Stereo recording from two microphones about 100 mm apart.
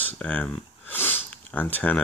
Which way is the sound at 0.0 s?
15° left (ahead or behind).